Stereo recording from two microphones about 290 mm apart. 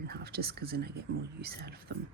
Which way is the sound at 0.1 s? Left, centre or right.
Right.